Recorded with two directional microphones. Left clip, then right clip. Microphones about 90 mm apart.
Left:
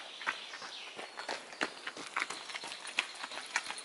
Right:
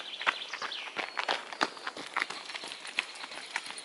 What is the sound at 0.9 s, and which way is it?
Walk, 25° right (ahead or behind).